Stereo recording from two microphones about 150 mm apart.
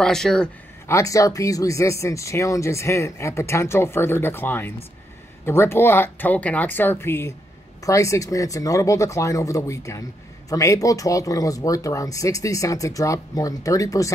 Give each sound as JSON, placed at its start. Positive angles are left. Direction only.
{"t": 0.0, "sound": "speech", "side_deg": 5}
{"t": 0.8, "sound": "speech", "side_deg": 20}